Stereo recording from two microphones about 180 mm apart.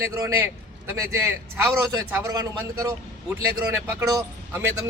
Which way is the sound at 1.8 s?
20° right (ahead or behind).